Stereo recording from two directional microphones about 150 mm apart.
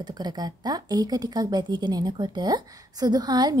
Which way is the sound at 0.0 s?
25° right (ahead or behind).